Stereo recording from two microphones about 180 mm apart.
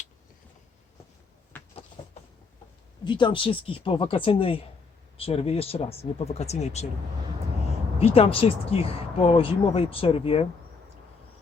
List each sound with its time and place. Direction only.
1.5 s a sound: 10° left (ahead or behind)
3.0 s speech: 25° left (ahead or behind)
7.9 s speech: 35° left (ahead or behind)